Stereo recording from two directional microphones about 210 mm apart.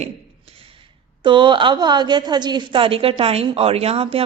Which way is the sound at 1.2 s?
25° right (ahead or behind).